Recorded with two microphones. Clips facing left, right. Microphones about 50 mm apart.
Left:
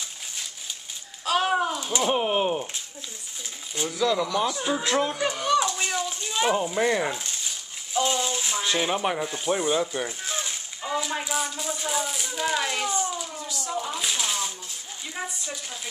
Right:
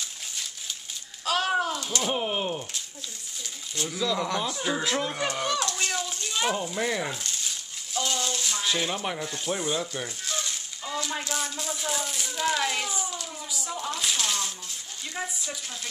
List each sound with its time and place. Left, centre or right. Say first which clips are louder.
1.2 s a sound: left 2 dB; centre
1.8 s speech: left 4 dB; centre
4.6 s speech: left 3 dB; centre
5.7 s a sound: left 2 dB; centre
8.6 s speech: left 4 dB; centre
13.7 s shuffling cards: left 1 dB; centre
15.1 s speech: even; centre